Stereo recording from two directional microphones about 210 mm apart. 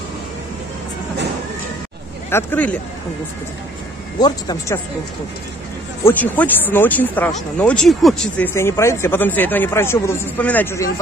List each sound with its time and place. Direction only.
2.3 s speech: 5° left (ahead or behind)
4.2 s speech: 20° left (ahead or behind)
6.0 s speech: 10° left (ahead or behind)
8.5 s speech: 15° left (ahead or behind)